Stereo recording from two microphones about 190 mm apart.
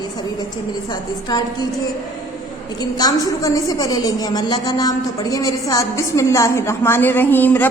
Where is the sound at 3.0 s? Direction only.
20° left (ahead or behind).